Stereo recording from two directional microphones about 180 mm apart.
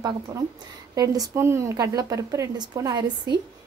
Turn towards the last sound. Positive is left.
turn(degrees=-20)  # may be behind; listen again after turning